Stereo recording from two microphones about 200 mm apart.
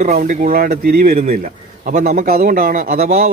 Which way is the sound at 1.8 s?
40° right (ahead or behind).